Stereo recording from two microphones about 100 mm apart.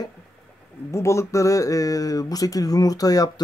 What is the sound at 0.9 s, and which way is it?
Speech, 30° left (ahead or behind).